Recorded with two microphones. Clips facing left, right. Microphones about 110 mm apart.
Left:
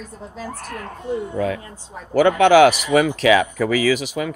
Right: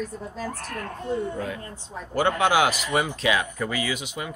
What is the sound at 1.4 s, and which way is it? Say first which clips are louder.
Speech: left 8 dB; 90° left.